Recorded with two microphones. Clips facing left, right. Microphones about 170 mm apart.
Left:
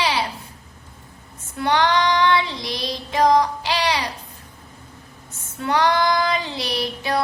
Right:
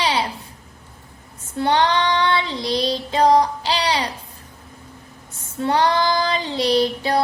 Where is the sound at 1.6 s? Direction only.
30° right (ahead or behind).